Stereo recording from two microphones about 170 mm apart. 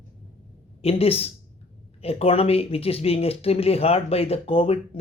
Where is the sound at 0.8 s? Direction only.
35° left (ahead or behind).